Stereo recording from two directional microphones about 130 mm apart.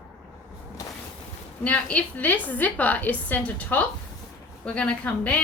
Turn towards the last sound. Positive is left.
turn(degrees=10)  # may be behind; listen again after turning